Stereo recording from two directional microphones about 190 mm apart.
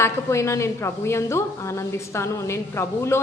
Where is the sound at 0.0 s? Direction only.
15° left (ahead or behind).